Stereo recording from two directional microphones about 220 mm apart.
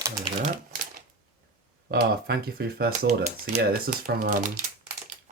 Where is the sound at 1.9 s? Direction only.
45° right (ahead or behind).